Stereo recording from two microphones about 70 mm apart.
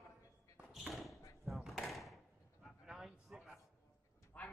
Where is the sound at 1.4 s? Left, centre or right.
Centre.